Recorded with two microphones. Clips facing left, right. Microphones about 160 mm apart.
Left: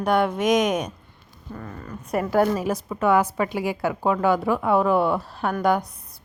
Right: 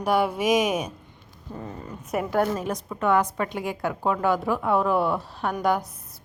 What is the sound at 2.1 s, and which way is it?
A woman's voice, centre (ahead or behind).